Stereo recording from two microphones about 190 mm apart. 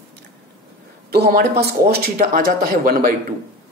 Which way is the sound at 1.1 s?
55° right (ahead or behind).